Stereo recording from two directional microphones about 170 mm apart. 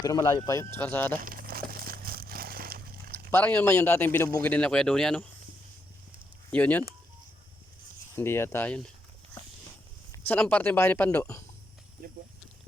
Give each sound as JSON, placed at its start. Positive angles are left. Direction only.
{"t": 0.0, "sound": "speech", "side_deg": 20}
{"t": 1.2, "sound": "crumpling", "side_deg": -55}
{"t": 3.3, "sound": "speech", "side_deg": 10}
{"t": 6.5, "sound": "speech", "side_deg": 10}
{"t": 8.1, "sound": "speech", "side_deg": 15}
{"t": 10.1, "sound": "speech", "side_deg": 10}
{"t": 12.0, "sound": "snake", "side_deg": -60}